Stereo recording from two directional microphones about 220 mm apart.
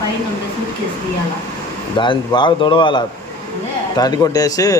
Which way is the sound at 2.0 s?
20° left (ahead or behind).